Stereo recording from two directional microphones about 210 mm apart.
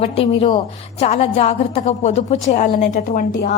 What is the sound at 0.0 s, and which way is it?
A woman's voice, 30° left (ahead or behind).